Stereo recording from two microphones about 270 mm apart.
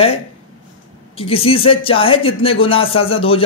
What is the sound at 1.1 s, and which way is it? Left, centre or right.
Speech, left.